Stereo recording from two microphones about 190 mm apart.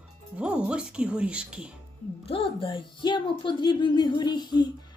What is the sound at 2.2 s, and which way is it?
Speech, 30° left (ahead or behind).